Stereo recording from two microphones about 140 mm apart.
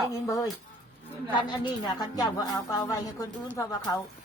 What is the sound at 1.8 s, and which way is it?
Speech, 30° left (ahead or behind).